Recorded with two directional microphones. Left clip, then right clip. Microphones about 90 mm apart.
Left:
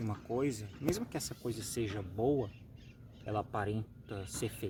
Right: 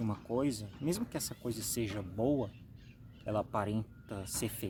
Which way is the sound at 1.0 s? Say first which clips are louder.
Right 1 dB; 10° left (ahead or behind).